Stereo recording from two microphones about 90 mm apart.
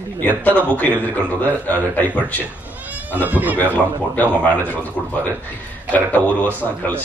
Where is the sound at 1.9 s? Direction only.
20° left (ahead or behind).